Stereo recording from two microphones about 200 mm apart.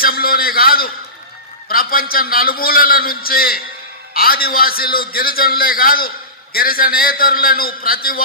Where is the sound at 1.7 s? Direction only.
45° left (ahead or behind).